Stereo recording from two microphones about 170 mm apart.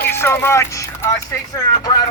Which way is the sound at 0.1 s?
15° left (ahead or behind).